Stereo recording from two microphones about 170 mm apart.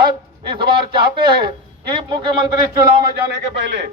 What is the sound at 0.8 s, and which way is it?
Speech, 65° right (ahead or behind).